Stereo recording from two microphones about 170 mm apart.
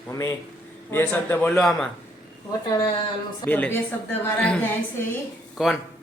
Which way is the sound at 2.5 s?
20° left (ahead or behind).